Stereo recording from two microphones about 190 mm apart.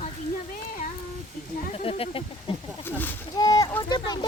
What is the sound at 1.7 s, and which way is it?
Speech, 30° left (ahead or behind).